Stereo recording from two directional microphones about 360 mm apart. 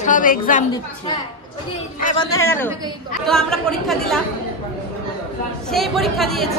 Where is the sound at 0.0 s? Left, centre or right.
Left.